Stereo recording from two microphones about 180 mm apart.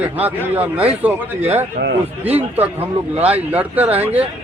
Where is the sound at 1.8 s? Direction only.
45° right (ahead or behind).